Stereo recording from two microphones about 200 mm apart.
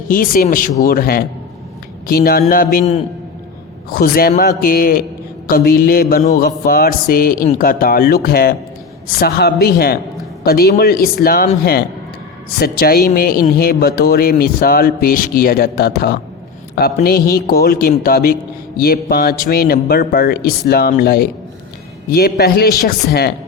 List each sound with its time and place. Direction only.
0.1 s speech: 45° left (ahead or behind)